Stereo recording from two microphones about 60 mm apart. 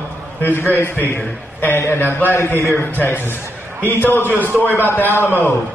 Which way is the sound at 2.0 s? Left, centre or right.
Left.